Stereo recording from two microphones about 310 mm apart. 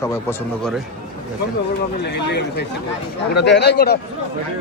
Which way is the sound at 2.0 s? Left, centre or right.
Left.